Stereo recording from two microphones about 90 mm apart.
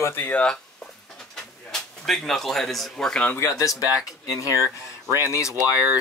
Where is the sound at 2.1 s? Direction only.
5° left (ahead or behind).